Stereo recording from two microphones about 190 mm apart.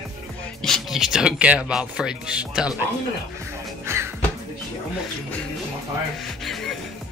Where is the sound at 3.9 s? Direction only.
15° right (ahead or behind).